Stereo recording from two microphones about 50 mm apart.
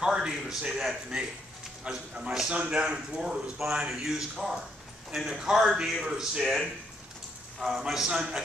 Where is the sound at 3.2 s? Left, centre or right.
Centre.